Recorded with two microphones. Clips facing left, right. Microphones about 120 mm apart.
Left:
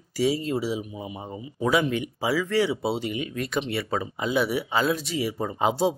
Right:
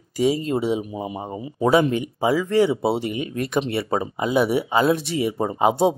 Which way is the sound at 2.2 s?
20° right (ahead or behind).